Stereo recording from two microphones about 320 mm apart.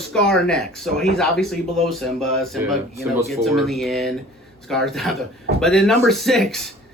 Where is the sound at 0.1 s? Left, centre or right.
Centre.